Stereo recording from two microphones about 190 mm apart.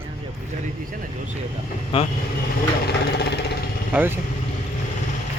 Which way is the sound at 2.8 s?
60° left (ahead or behind).